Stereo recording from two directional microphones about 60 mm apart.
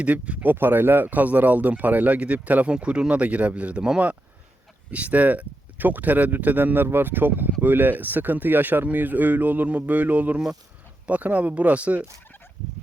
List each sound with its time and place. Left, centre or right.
0.0 s speech: right
0.5 s speech: right